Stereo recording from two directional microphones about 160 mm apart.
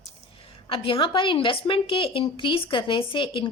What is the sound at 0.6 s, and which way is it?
A woman's voice, 35° left (ahead or behind).